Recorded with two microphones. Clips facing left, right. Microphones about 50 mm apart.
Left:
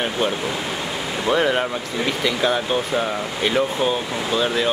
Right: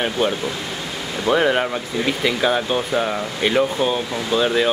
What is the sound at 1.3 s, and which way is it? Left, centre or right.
Speech, centre.